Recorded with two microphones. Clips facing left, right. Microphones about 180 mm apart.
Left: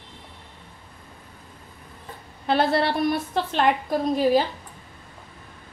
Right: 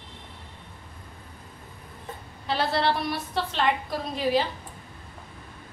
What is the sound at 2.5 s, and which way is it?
A woman's voice, 55° left (ahead or behind).